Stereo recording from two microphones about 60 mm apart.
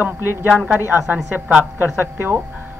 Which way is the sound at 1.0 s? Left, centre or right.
Right.